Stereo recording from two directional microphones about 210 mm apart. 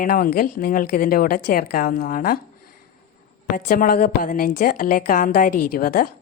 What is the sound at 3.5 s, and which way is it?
A woman's voice, 40° left (ahead or behind).